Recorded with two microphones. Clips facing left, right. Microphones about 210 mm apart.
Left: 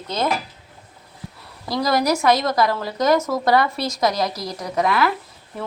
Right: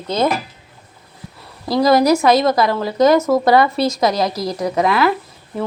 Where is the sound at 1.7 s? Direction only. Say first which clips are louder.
Right 7 dB; 25° right (ahead or behind).